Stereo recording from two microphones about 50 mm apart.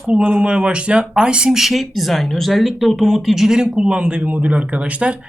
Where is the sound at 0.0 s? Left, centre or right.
Right.